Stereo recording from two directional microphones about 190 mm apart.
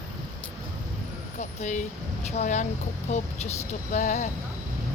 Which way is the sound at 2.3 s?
40° left (ahead or behind).